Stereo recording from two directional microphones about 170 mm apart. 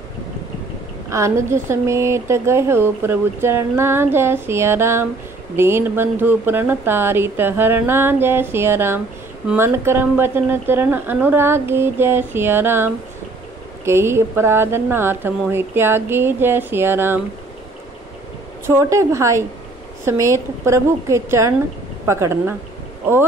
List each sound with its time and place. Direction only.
1.1 s a woman's voice: 15° right (ahead or behind)
18.7 s a woman's voice: 15° right (ahead or behind)